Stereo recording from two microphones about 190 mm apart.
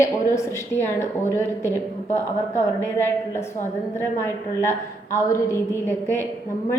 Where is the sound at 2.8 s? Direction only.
15° left (ahead or behind).